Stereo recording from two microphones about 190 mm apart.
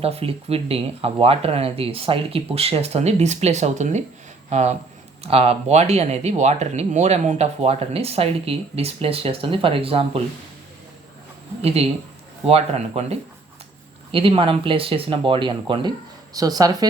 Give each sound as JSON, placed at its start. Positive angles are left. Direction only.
{"t": 0.0, "sound": "speech", "side_deg": -30}
{"t": 11.6, "sound": "speech", "side_deg": -30}